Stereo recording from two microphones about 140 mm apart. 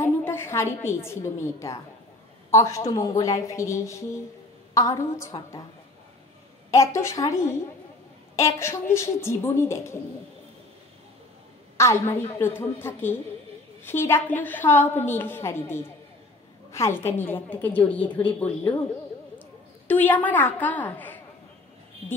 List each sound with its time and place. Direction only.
0.0 s a woman's voice: 15° left (ahead or behind)
6.7 s speech: 20° left (ahead or behind)
11.7 s a woman's voice: 20° left (ahead or behind)
19.9 s a woman's voice: 10° left (ahead or behind)